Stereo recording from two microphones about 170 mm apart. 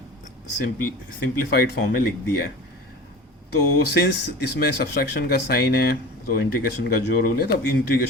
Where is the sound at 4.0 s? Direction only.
70° left (ahead or behind).